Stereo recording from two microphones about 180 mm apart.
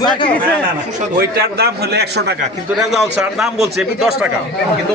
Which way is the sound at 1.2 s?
65° right (ahead or behind).